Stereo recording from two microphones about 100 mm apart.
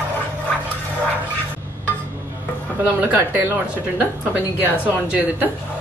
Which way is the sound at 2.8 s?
20° right (ahead or behind).